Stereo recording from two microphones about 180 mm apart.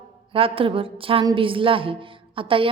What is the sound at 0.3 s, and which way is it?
A woman's voice, 30° right (ahead or behind).